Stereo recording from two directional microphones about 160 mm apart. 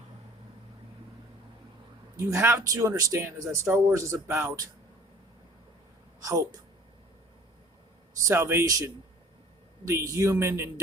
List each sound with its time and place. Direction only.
2.1 s speech: 15° right (ahead or behind)
8.2 s speech: 15° right (ahead or behind)